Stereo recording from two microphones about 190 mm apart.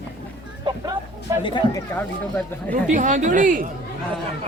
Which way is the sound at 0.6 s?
25° right (ahead or behind).